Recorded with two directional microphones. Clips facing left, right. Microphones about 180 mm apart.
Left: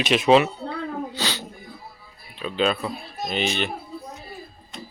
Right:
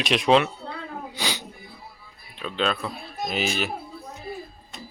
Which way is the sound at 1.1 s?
15° right (ahead or behind).